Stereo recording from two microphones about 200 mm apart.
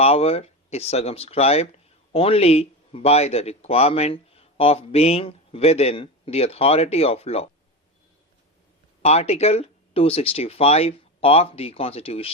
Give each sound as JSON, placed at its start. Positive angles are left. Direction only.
{"t": 0.0, "sound": "speech", "side_deg": 30}
{"t": 9.0, "sound": "speech", "side_deg": 30}